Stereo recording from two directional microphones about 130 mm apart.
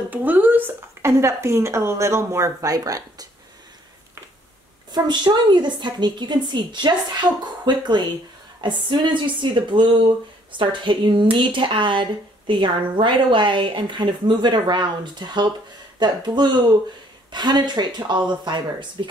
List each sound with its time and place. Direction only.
0.1 s speech: 15° right (ahead or behind)
4.9 s speech: 35° right (ahead or behind)